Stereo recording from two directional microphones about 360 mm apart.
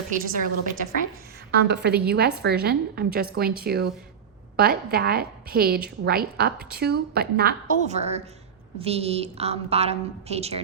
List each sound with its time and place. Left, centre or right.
0.1 s a woman's voice: right
1.5 s a woman's voice: right